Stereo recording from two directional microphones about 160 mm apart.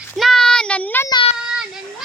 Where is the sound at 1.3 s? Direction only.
5° right (ahead or behind).